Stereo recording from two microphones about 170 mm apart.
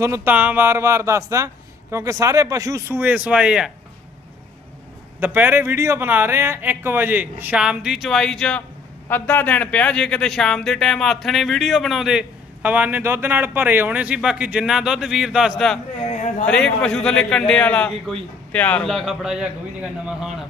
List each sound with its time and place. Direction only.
0.0 s speech: 15° right (ahead or behind)
5.2 s speech: 10° right (ahead or behind)